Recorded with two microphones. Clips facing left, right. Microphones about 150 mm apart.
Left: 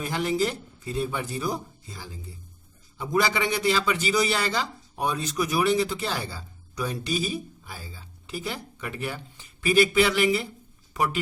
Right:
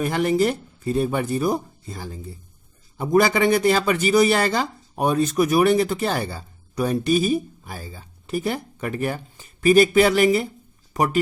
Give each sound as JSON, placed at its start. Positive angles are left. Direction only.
{"t": 0.0, "sound": "a man's voice", "side_deg": -55}